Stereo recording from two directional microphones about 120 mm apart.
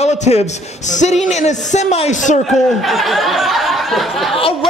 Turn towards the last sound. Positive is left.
turn(degrees=0)  # may be behind; listen again after turning